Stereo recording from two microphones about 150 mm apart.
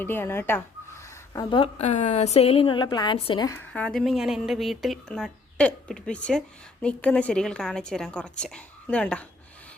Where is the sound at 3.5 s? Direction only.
10° left (ahead or behind).